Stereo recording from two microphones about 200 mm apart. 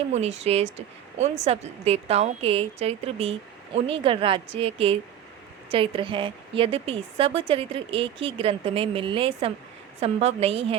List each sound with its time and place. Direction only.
0.1 s a woman's voice: 30° right (ahead or behind)